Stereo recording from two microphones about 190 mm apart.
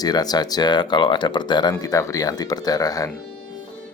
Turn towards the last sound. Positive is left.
turn(degrees=20)  # may be behind; listen again after turning